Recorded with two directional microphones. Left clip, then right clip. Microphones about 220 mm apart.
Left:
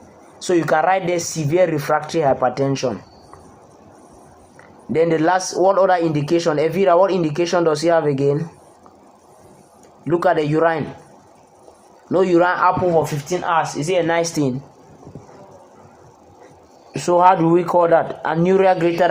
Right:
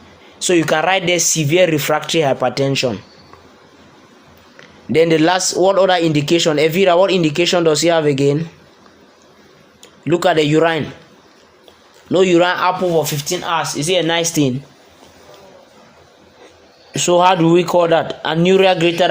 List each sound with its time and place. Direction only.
0.4 s speech: 45° right (ahead or behind)
1.7 s speech: 70° right (ahead or behind)
2.0 s speech: 50° right (ahead or behind)
4.9 s speech: 45° right (ahead or behind)
10.0 s speech: 45° right (ahead or behind)
12.1 s speech: 40° right (ahead or behind)
14.0 s speech: 35° right (ahead or behind)
17.1 s speech: 40° right (ahead or behind)